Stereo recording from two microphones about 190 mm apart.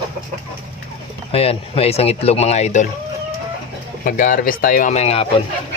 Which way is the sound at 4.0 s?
45° left (ahead or behind).